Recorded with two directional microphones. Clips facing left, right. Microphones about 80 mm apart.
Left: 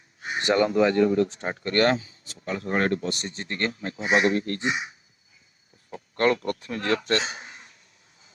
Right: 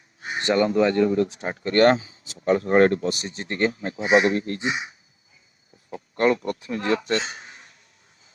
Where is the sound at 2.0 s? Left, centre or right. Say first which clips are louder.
Right 2 dB; right.